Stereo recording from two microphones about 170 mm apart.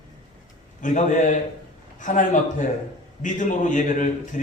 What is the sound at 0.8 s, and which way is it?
A man's voice, 45° left (ahead or behind).